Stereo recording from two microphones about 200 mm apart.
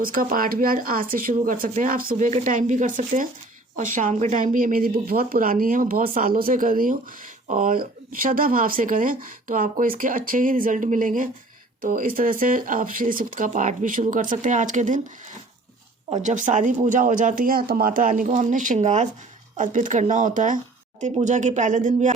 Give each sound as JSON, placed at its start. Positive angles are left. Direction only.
{"t": 0.0, "sound": "speech", "side_deg": -45}
{"t": 16.2, "sound": "speech", "side_deg": -40}